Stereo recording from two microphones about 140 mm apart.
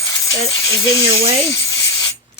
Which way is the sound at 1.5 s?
25° left (ahead or behind).